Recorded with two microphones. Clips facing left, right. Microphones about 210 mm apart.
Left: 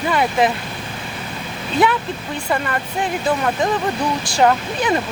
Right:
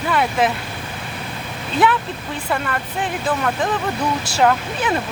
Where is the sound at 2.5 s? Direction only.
5° left (ahead or behind).